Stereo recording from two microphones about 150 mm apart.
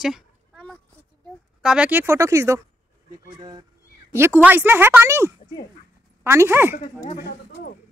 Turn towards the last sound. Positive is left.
turn(degrees=-15)  # may be behind; listen again after turning